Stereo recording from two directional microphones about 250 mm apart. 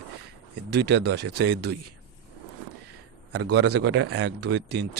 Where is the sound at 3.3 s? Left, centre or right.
Right.